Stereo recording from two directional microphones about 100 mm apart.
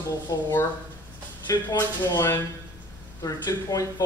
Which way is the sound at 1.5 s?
35° left (ahead or behind).